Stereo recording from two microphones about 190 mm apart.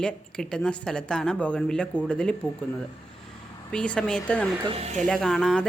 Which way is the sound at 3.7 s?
5° left (ahead or behind).